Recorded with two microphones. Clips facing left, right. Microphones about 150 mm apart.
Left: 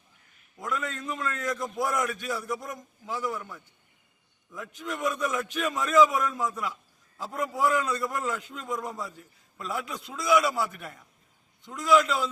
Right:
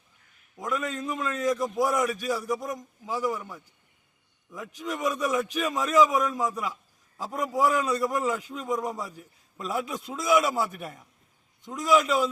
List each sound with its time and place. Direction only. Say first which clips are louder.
0.5 s a man's voice: right 3 dB; 15° right (ahead or behind)